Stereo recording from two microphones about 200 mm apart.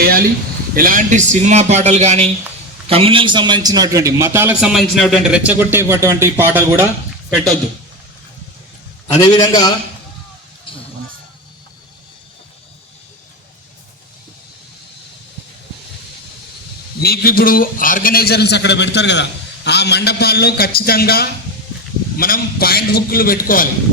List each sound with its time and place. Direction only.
0.8 s a man's voice: 45° right (ahead or behind); by 6.8 s 10° right (ahead or behind)
7.3 s a man's voice: centre (ahead or behind)
9.2 s a man's voice: 20° left (ahead or behind)
10.7 s a sound: 25° left (ahead or behind)
17.0 s a man's voice: 50° left (ahead or behind)